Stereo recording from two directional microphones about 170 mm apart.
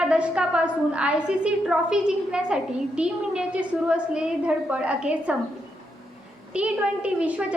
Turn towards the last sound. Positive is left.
turn(degrees=-5)  # may be behind; listen again after turning